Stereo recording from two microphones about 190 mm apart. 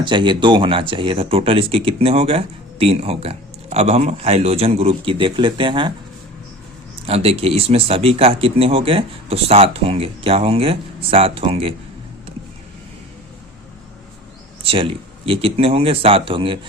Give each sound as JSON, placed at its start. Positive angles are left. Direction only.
{"t": 0.0, "sound": "speech", "side_deg": -25}
{"t": 7.1, "sound": "speech", "side_deg": -30}
{"t": 14.6, "sound": "speech", "side_deg": -30}